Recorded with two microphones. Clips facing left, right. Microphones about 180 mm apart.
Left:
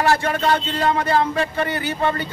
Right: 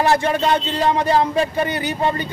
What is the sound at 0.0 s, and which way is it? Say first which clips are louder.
A man's voice: right 2 dB; 20° right (ahead or behind).